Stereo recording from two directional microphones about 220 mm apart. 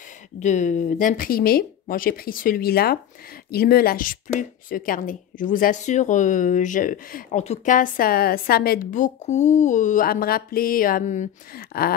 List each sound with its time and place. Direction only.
0.4 s speech: 35° left (ahead or behind)